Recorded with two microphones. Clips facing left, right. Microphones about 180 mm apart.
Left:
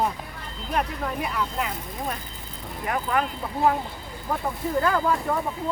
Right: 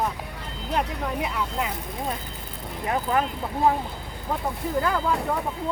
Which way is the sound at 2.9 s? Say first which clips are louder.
Right 1 dB; 30° right (ahead or behind).